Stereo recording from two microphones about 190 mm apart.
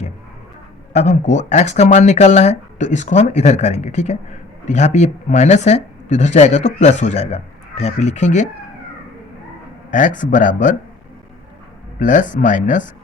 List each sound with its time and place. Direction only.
0.9 s speech: 40° left (ahead or behind)
9.9 s speech: 40° left (ahead or behind)
11.9 s speech: 40° left (ahead or behind)